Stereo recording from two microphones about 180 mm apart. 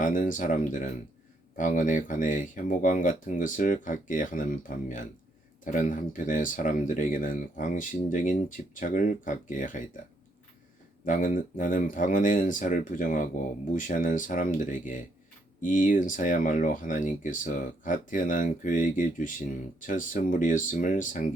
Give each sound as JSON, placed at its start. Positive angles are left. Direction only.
{"t": 0.0, "sound": "speech", "side_deg": 45}
{"t": 11.0, "sound": "speech", "side_deg": 45}